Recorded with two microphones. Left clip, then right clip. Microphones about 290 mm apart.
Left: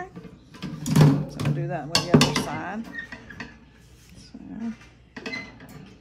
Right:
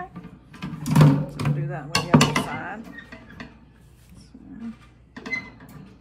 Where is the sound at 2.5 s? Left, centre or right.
Left.